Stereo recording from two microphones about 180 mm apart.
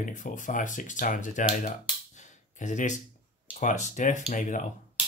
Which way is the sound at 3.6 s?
45° left (ahead or behind).